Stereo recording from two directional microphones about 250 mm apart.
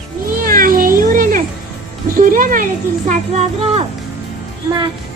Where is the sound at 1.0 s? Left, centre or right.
Right.